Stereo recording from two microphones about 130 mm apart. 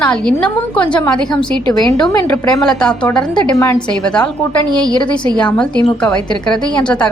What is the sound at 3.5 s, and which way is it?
Speech, 25° left (ahead or behind).